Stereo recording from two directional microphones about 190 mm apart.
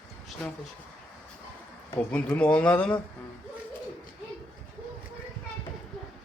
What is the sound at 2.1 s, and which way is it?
Speech, 5° left (ahead or behind).